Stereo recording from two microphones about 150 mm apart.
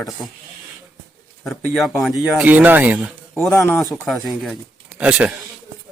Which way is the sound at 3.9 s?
Centre (ahead or behind).